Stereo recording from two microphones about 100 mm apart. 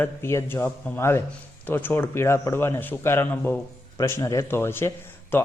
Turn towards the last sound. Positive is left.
turn(degrees=20)  # may be behind; listen again after turning